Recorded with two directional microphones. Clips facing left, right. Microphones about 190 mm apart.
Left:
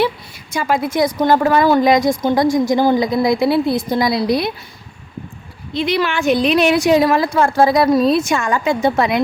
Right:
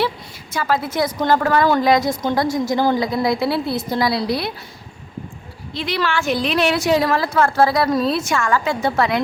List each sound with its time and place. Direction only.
0.5 s a woman's voice: 15° left (ahead or behind)
5.7 s a woman's voice: 20° left (ahead or behind)